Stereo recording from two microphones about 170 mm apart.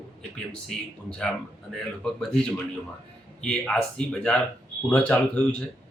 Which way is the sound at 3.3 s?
5° left (ahead or behind).